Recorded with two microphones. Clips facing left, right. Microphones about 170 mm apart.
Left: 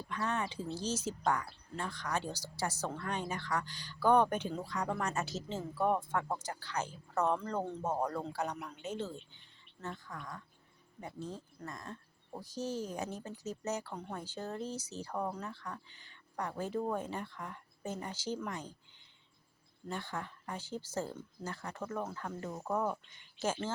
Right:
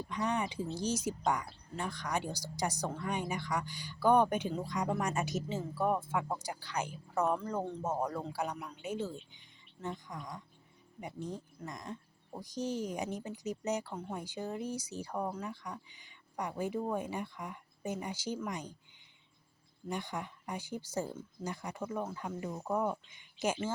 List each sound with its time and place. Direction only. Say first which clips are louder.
0.1 s a woman's voice: right 2 dB; 15° right (ahead or behind)
19.9 s a woman's voice: right 2 dB; 15° right (ahead or behind)